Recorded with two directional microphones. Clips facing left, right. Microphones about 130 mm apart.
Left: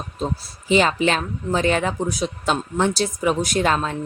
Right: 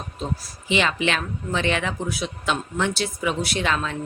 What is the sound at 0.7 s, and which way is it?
Speech, 40° left (ahead or behind).